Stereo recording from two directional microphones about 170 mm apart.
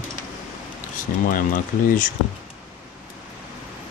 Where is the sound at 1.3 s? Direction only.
55° left (ahead or behind).